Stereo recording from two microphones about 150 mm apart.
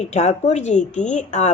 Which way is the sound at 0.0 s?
45° left (ahead or behind).